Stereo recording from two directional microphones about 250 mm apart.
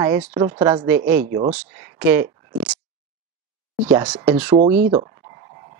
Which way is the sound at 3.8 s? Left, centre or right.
Centre.